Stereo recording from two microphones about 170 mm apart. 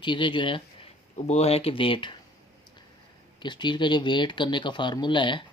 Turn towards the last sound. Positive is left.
turn(degrees=30)  # may be behind; listen again after turning